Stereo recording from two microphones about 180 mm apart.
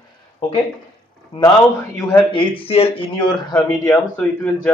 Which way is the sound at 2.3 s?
30° left (ahead or behind).